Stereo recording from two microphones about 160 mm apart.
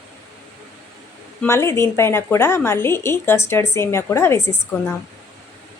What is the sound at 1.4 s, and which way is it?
A woman's voice, 15° left (ahead or behind).